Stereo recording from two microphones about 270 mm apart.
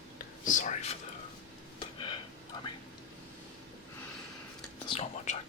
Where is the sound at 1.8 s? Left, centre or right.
Centre.